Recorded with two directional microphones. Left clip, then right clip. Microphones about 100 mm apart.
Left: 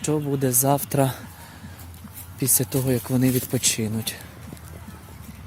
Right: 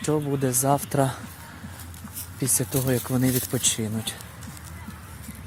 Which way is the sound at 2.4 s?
90° left.